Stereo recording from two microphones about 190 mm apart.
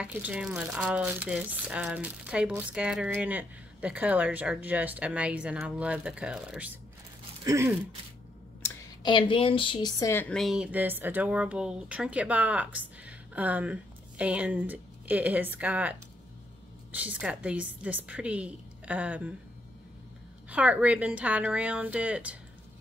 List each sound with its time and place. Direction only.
0.0 s speech: 5° right (ahead or behind)
7.4 s speech: 15° right (ahead or behind)
9.0 s a woman's voice: 25° left (ahead or behind)
10.3 s speech: centre (ahead or behind)
20.4 s speech: 5° right (ahead or behind)